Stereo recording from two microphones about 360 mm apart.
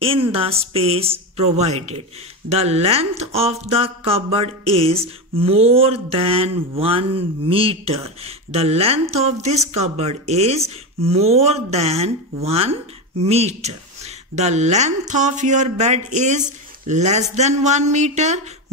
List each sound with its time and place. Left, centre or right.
0.0 s speech: centre